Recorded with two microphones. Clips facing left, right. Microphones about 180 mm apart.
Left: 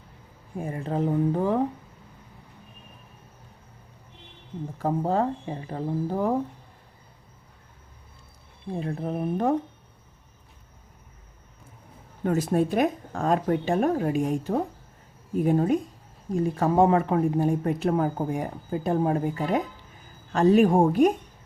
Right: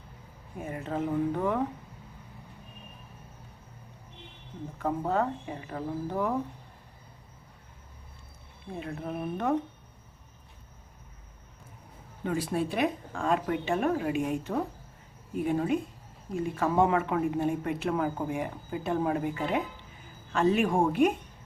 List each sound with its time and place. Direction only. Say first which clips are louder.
0.6 s speech: left 4 dB; 35° left (ahead or behind)
4.8 s speech: left 4 dB; 30° left (ahead or behind)
8.8 s speech: left 5 dB; 35° left (ahead or behind)
12.2 s speech: left 6 dB; 45° left (ahead or behind)